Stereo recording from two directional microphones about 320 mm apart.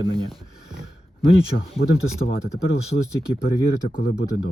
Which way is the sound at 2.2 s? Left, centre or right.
Left.